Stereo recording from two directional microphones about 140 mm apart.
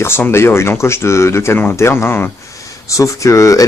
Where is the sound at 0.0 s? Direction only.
15° left (ahead or behind).